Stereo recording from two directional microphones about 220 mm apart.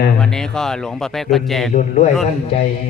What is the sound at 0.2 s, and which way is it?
Speech, 5° left (ahead or behind).